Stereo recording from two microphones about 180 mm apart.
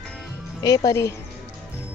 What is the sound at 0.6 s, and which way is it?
Speech, 20° left (ahead or behind).